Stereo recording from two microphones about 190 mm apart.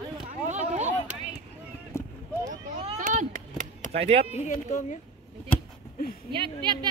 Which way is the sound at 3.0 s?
45° right (ahead or behind).